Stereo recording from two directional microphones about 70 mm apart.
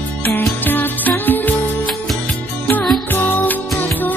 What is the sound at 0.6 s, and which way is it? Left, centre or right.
Music, left.